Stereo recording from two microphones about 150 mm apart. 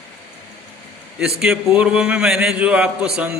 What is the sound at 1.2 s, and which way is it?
A man's voice, 5° right (ahead or behind).